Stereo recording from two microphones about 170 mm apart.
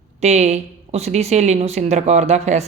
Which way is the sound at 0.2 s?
40° right (ahead or behind).